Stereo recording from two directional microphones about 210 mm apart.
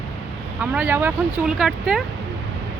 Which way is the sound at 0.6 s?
5° right (ahead or behind).